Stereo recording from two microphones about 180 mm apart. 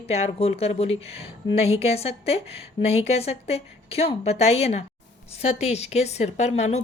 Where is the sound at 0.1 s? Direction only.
35° left (ahead or behind).